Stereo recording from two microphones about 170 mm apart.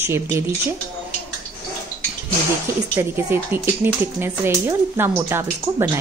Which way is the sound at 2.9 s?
15° right (ahead or behind).